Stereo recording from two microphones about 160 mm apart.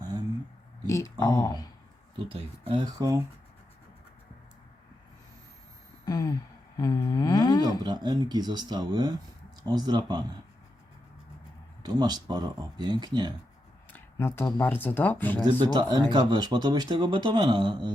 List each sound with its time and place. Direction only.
0.9 s speech: 20° left (ahead or behind)
2.3 s speech: 35° right (ahead or behind)
6.1 s a sound: 20° left (ahead or behind)
7.6 s speech: 25° right (ahead or behind)
11.8 s speech: 25° right (ahead or behind)
13.9 s speech: 15° left (ahead or behind)
15.6 s speech: 25° right (ahead or behind)